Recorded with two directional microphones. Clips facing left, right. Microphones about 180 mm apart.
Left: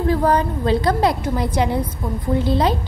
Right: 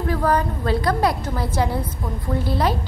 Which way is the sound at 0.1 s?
20° left (ahead or behind).